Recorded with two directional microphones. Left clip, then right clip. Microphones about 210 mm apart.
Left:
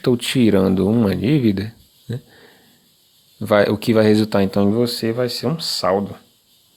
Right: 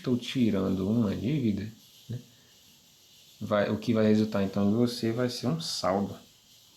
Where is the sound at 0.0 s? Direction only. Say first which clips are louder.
Left 12 dB; 45° left (ahead or behind).